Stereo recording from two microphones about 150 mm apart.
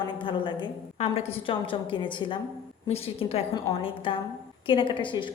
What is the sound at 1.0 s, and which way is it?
A woman's voice, 45° left (ahead or behind).